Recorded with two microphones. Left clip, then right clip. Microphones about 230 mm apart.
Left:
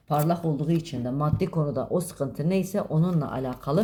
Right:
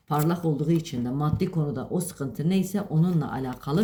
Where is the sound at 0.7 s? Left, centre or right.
Left.